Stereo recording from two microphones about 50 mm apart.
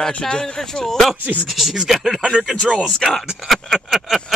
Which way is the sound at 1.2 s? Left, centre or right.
Right.